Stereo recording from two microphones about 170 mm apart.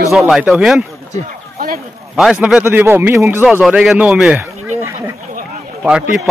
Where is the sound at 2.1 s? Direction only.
Centre (ahead or behind).